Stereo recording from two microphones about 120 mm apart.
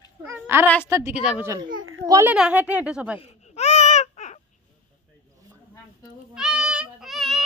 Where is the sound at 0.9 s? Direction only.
25° right (ahead or behind).